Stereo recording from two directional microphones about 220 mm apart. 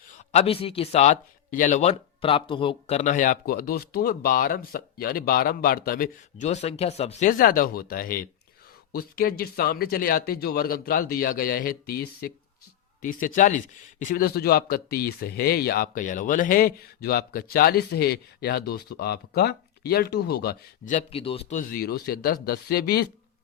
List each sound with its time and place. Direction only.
0.1 s a man's voice: 30° left (ahead or behind); by 20.9 s 45° left (ahead or behind)
20.9 s a man's voice: 25° left (ahead or behind); by 23.0 s 45° left (ahead or behind)